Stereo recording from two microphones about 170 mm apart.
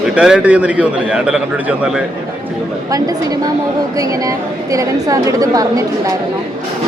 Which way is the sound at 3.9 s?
20° right (ahead or behind).